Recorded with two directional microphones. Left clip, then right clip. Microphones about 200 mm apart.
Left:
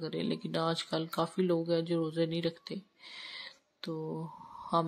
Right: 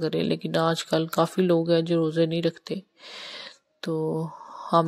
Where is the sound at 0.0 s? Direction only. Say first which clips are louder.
Right 10 dB; 30° right (ahead or behind).